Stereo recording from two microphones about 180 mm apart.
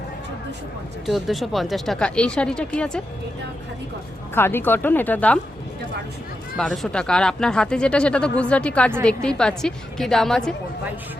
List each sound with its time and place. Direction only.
1.0 s speech: centre (ahead or behind)
4.4 s a woman's voice: 10° left (ahead or behind)
6.6 s speech: 5° left (ahead or behind)